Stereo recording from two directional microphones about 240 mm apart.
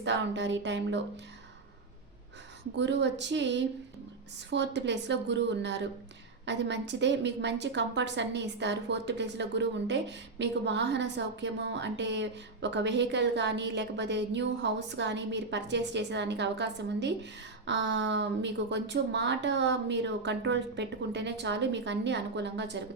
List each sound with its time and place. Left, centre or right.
0.0 s a woman's voice: right
2.7 s a woman's voice: right